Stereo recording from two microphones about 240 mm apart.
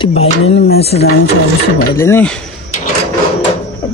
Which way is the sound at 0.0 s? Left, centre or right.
Left.